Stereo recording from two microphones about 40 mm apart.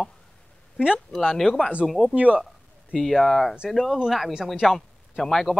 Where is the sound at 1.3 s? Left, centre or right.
Centre.